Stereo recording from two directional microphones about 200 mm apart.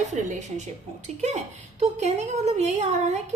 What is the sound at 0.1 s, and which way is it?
A woman's voice, 35° right (ahead or behind).